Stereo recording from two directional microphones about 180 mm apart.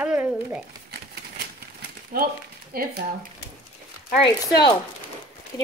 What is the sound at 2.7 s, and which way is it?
Speech, 55° right (ahead or behind).